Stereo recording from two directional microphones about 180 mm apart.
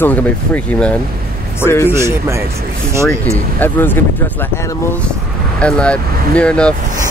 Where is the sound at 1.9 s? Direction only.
15° right (ahead or behind).